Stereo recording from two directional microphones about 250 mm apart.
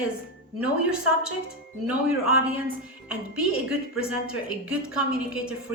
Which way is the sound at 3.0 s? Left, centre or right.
Centre.